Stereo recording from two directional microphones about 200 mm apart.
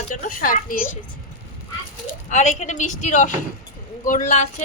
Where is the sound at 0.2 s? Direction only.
45° left (ahead or behind).